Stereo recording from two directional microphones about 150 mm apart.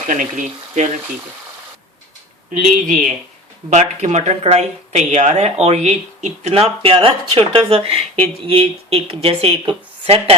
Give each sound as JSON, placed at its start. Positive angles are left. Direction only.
{"t": 0.1, "sound": "speech", "side_deg": -55}
{"t": 2.5, "sound": "speech", "side_deg": -60}